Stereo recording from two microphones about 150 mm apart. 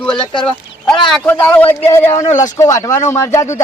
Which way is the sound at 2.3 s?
55° left (ahead or behind).